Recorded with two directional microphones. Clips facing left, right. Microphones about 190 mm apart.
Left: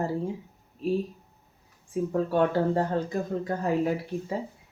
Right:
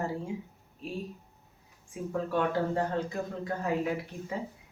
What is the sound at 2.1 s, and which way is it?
Speech, 40° left (ahead or behind).